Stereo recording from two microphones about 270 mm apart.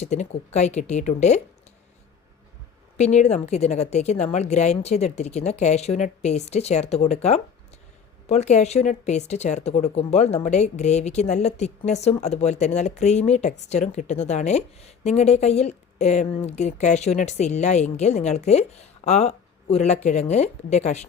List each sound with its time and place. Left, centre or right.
0.0 s speech: left
3.0 s speech: left